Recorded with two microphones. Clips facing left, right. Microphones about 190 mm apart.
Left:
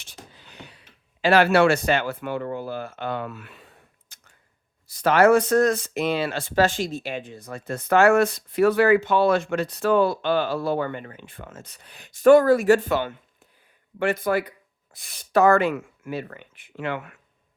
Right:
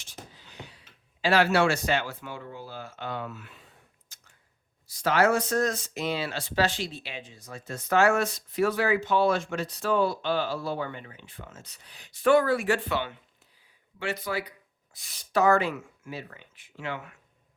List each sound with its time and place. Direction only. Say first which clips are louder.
0.0 s speech: even; 60° left (ahead or behind)
4.1 s a sound: left 3 dB; 60° left (ahead or behind)
4.9 s speech: left 7 dB; 60° left (ahead or behind)